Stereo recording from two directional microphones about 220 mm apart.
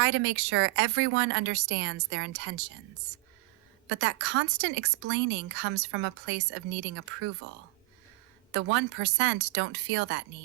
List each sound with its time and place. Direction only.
0.0 s speech: 60° right (ahead or behind)
3.8 s a woman's voice: 55° right (ahead or behind)
8.5 s speech: 55° right (ahead or behind)